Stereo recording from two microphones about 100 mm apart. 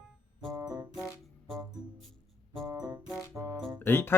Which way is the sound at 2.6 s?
35° right (ahead or behind).